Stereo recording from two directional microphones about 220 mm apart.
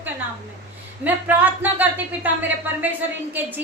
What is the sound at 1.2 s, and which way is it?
Speech, 5° right (ahead or behind).